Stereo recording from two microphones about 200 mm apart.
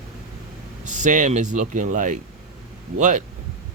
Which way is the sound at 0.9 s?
40° right (ahead or behind).